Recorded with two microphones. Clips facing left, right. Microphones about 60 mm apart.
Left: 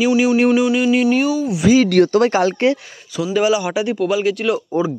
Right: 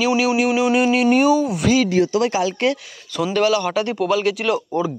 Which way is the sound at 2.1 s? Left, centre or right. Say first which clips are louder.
Left 4 dB; left.